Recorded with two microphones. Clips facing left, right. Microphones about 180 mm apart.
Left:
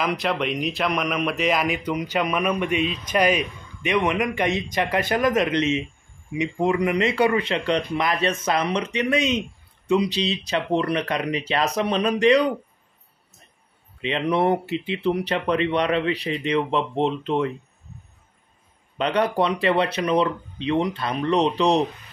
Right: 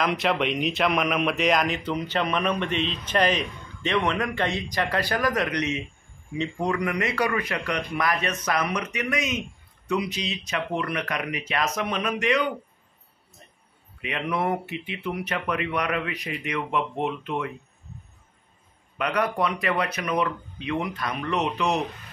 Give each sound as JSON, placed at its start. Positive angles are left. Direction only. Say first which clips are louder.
{"t": 0.0, "sound": "speech", "louder": "even", "side_deg": 0}
{"t": 14.0, "sound": "speech", "louder": "left 6 dB", "side_deg": 30}
{"t": 18.9, "sound": "speech", "louder": "left 4 dB", "side_deg": 30}